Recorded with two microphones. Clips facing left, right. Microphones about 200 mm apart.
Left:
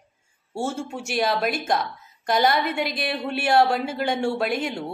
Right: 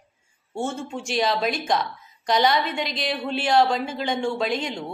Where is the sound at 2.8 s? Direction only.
55° left (ahead or behind).